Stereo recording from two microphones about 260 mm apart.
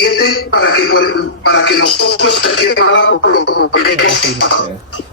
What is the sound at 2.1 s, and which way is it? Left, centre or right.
Music, left.